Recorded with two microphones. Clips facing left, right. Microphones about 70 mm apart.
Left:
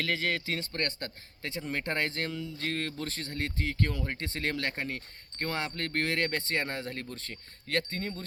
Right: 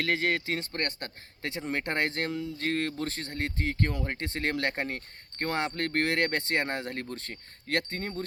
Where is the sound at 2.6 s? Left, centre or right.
Right.